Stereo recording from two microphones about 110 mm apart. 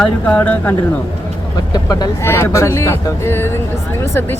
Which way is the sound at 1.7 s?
35° left (ahead or behind).